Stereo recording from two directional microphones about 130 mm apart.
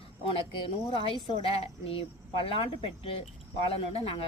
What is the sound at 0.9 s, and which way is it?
Speech, 45° left (ahead or behind).